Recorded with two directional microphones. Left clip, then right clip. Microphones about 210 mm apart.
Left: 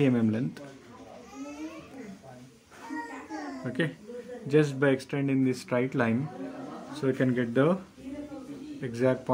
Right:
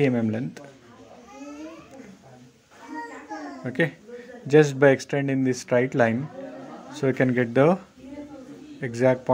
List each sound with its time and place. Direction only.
0.0 s speech: 10° right (ahead or behind)
3.6 s speech: 20° right (ahead or behind)
8.8 s speech: 20° right (ahead or behind)